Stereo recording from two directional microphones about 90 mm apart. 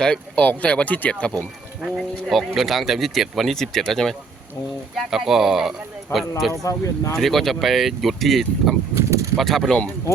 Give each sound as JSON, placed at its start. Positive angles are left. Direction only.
{"t": 0.0, "sound": "speech", "side_deg": 10}
{"t": 1.8, "sound": "speech", "side_deg": 0}
{"t": 6.5, "sound": "speech", "side_deg": 35}
{"t": 7.2, "sound": "speech", "side_deg": 0}
{"t": 9.0, "sound": "a sound", "side_deg": -35}
{"t": 9.3, "sound": "speech", "side_deg": 0}